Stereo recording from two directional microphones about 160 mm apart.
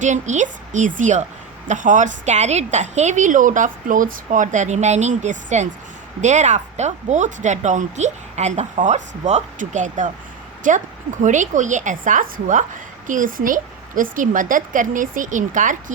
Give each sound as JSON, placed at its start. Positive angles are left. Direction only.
{"t": 0.0, "sound": "a woman's voice", "side_deg": -50}